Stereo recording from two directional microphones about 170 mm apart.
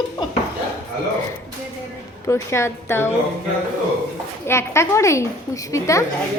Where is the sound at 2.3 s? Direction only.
15° left (ahead or behind).